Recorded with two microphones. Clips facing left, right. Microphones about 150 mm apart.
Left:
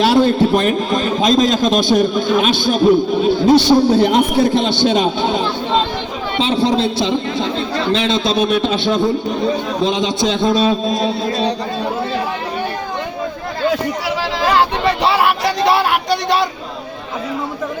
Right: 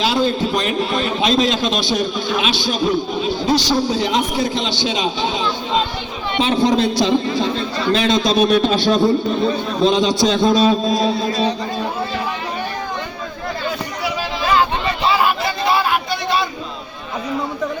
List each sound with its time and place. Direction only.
0.0 s a man's voice: 55° left (ahead or behind)
6.4 s a man's voice: 30° left (ahead or behind)
15.1 s a sound: 70° left (ahead or behind)